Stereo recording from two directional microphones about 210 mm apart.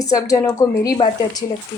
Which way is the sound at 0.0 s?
15° left (ahead or behind).